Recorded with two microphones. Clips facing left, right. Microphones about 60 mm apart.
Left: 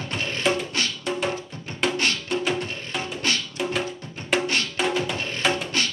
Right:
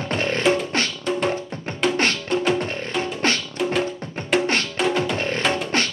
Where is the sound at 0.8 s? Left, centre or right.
Right.